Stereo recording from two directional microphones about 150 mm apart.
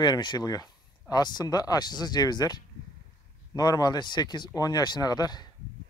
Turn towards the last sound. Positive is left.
turn(degrees=30)  # may be behind; listen again after turning